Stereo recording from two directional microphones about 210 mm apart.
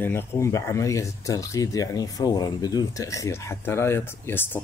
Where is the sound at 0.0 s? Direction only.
10° left (ahead or behind).